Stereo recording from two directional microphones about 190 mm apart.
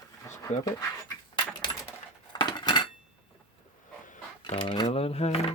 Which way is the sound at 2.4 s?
25° left (ahead or behind).